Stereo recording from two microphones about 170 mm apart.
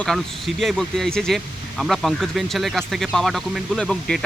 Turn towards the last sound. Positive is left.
turn(degrees=5)  # may be behind; listen again after turning